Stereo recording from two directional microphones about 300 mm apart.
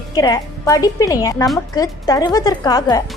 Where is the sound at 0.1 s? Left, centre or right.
Centre.